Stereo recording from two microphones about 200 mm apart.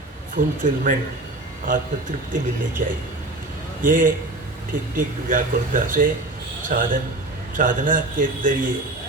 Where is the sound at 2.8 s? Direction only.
40° right (ahead or behind).